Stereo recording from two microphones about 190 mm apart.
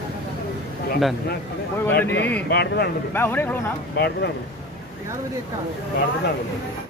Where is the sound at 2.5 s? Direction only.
60° left (ahead or behind).